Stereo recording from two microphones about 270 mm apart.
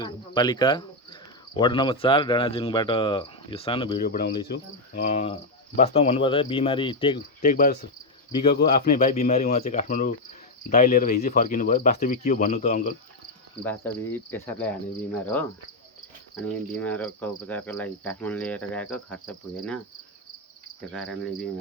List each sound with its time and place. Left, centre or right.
0.0 s speech: centre
4.0 s speech: left; by 7.2 s centre
7.4 s speech: left
13.7 s cricket: centre
20.8 s cricket: centre